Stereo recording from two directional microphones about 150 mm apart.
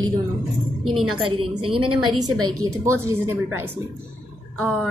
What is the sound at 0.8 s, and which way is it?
Speech, centre (ahead or behind).